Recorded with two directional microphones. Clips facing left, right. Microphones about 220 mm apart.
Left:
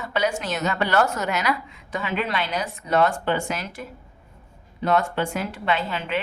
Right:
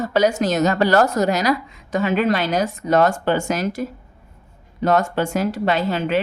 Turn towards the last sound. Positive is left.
turn(degrees=-40)  # may be behind; listen again after turning